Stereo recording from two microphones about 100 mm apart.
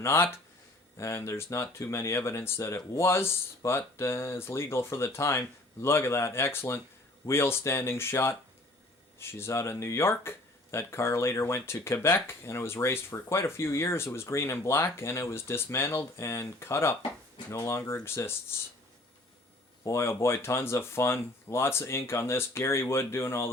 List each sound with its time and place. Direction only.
0.0 s speech: 25° left (ahead or behind)
19.8 s speech: 25° left (ahead or behind)